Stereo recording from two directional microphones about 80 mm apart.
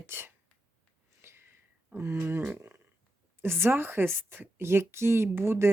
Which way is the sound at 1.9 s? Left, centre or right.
Right.